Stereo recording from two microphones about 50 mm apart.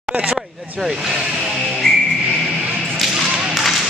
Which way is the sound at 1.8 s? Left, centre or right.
Centre.